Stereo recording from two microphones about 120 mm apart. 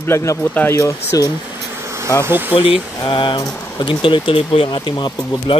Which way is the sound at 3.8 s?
45° left (ahead or behind).